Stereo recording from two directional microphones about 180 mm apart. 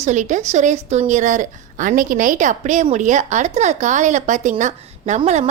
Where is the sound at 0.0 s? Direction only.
40° right (ahead or behind).